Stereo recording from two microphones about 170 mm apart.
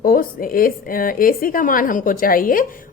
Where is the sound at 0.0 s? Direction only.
55° left (ahead or behind).